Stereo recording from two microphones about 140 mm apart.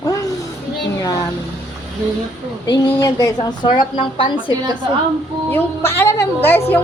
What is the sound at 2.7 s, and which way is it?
A woman's voice, 30° left (ahead or behind).